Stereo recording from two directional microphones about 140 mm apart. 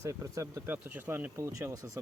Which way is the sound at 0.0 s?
20° right (ahead or behind).